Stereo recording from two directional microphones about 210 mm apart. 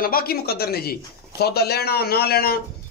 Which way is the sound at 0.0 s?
45° left (ahead or behind).